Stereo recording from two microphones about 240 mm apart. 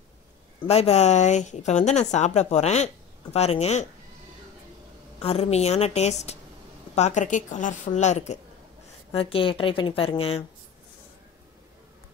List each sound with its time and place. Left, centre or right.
0.7 s speech: left
5.2 s a woman's voice: left